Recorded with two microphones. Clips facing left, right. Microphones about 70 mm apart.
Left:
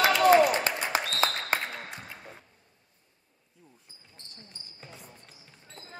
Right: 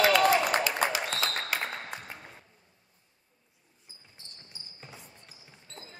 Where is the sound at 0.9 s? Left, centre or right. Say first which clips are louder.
Left 3 dB; left.